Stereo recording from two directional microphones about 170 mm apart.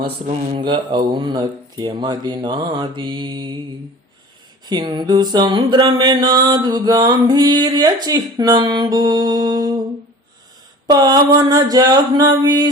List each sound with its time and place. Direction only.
0.0 s speech: 35° right (ahead or behind)
4.6 s speech: 25° right (ahead or behind)
10.8 s speech: 25° right (ahead or behind)